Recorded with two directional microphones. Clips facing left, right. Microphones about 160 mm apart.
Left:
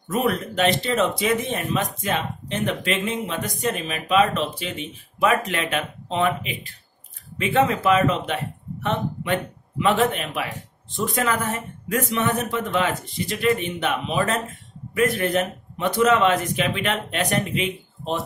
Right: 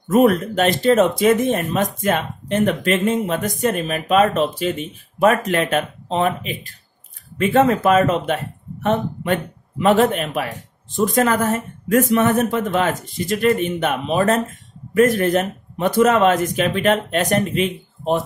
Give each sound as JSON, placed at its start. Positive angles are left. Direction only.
{"t": 0.1, "sound": "speech", "side_deg": -45}